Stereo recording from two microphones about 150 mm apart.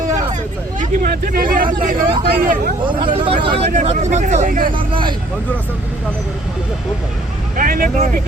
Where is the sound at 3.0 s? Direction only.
35° right (ahead or behind).